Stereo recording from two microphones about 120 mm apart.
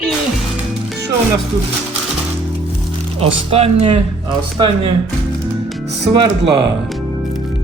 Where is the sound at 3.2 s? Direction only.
60° right (ahead or behind).